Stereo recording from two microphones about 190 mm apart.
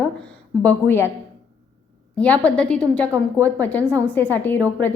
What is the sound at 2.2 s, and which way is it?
A woman's voice, 5° left (ahead or behind).